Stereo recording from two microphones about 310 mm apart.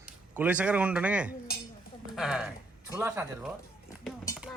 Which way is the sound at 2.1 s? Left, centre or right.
Centre.